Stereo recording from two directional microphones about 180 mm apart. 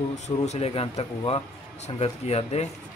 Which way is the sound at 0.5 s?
35° left (ahead or behind).